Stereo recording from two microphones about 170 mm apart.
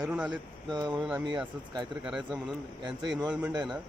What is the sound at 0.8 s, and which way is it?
Speech, 25° right (ahead or behind).